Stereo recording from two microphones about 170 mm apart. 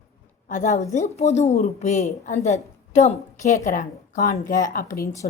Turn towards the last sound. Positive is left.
turn(degrees=50)  # may be behind; listen again after turning